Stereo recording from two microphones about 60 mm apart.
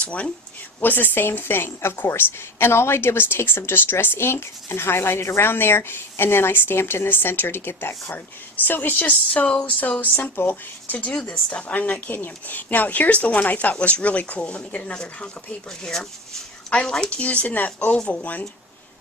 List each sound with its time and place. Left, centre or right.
0.0 s a woman's voice: left
17.9 s speech: centre